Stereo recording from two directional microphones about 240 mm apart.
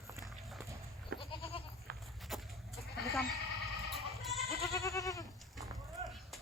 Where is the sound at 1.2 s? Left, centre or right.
Left.